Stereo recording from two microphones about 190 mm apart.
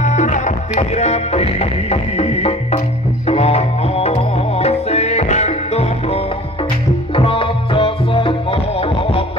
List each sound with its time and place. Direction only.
0.0 s music: 40° left (ahead or behind)